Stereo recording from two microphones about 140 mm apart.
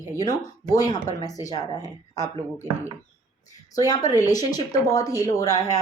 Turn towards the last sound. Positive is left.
turn(degrees=25)  # may be behind; listen again after turning